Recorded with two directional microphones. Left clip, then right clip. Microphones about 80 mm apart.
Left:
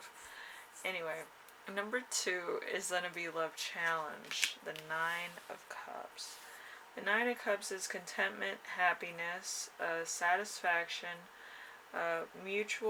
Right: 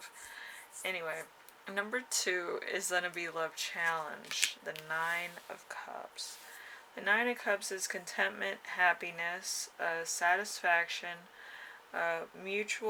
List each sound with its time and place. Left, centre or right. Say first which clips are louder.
0.8 s speech: right 2 dB; right